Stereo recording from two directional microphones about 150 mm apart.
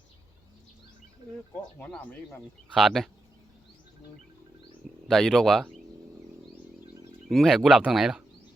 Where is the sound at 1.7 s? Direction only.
10° left (ahead or behind).